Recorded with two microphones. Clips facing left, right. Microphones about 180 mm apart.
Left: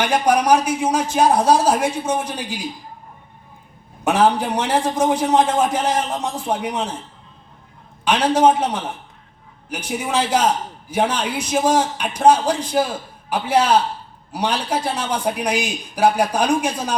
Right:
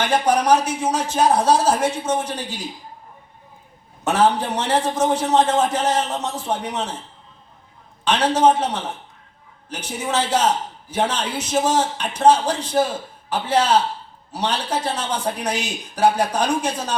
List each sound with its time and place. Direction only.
0.0 s a man's voice: 10° left (ahead or behind)
4.0 s a man's voice: 10° left (ahead or behind)
8.0 s a man's voice: 10° left (ahead or behind)